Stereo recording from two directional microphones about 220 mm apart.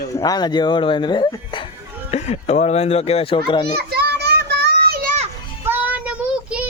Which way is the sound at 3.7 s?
45° right (ahead or behind).